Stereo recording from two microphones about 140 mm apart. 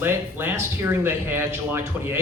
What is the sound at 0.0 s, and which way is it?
Speech, 15° right (ahead or behind).